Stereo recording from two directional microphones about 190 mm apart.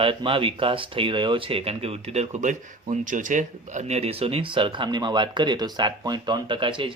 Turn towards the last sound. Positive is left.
turn(degrees=-25)  # may be behind; listen again after turning